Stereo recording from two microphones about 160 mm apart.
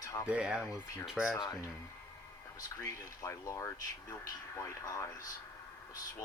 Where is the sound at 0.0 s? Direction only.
20° left (ahead or behind).